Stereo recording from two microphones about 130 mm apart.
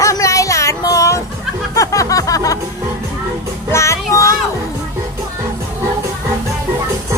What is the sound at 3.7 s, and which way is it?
Child singing, 20° left (ahead or behind).